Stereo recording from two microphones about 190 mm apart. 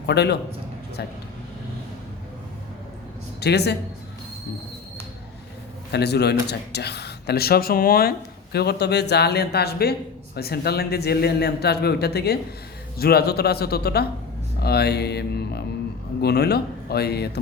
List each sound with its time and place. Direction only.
0.0 s speech: 60° left (ahead or behind)
3.4 s speech: 60° left (ahead or behind)
5.9 s speech: 60° left (ahead or behind)